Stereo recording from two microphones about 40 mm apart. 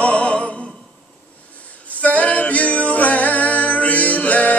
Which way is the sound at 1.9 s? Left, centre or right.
Left.